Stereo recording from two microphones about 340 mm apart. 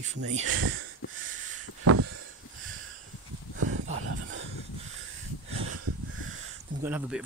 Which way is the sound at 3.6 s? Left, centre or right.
Right.